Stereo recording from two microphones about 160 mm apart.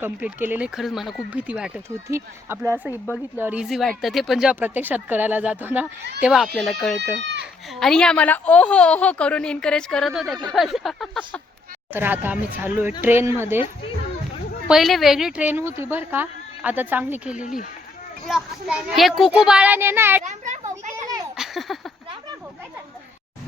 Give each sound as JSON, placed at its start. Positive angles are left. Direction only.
{"t": 0.0, "sound": "speech", "side_deg": -10}
{"t": 2.0, "sound": "a child's voice", "side_deg": -15}
{"t": 11.9, "sound": "speech", "side_deg": -10}
{"t": 14.7, "sound": "a child's voice", "side_deg": 0}
{"t": 20.2, "sound": "a child's voice", "side_deg": -50}
{"t": 21.3, "sound": "a sound", "side_deg": 0}